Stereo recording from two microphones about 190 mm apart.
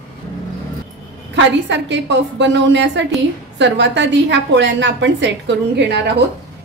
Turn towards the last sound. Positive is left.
turn(degrees=-65)  # may be behind; listen again after turning